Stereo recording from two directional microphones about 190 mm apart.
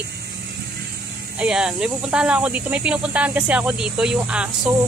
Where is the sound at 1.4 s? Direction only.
5° right (ahead or behind).